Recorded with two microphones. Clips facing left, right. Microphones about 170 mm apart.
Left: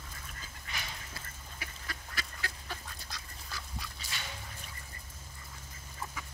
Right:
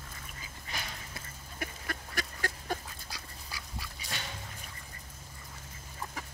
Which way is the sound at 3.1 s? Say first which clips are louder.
Right 1 dB; 10° right (ahead or behind).